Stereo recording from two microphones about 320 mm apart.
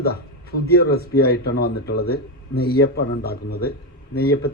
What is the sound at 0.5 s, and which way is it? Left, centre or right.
A man's voice, left.